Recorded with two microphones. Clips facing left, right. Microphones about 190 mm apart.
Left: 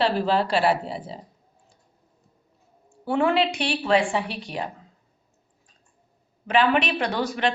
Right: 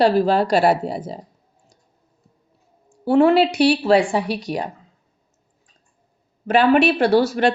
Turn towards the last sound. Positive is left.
turn(degrees=-45)  # may be behind; listen again after turning